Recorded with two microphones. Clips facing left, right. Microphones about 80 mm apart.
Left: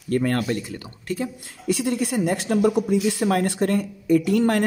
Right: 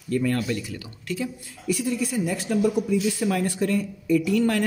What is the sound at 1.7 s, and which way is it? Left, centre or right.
Speech, left.